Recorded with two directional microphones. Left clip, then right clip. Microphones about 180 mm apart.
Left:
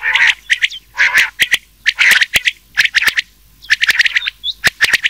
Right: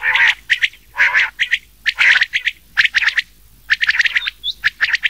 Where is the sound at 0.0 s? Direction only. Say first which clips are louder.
Left 2 dB; 25° left (ahead or behind).